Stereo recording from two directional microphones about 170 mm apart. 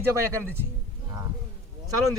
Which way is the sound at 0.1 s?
15° right (ahead or behind).